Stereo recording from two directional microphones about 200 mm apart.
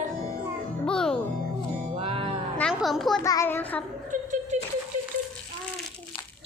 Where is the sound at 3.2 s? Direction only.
15° left (ahead or behind).